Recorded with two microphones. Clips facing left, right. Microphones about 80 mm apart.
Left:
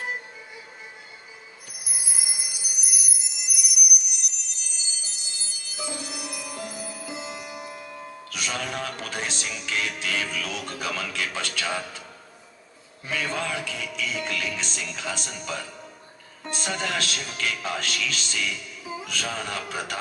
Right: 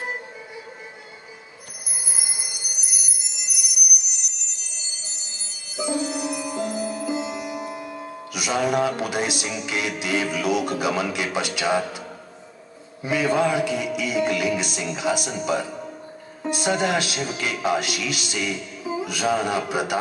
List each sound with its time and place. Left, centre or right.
2.0 s bell: centre
5.7 s music: centre
13.0 s music: centre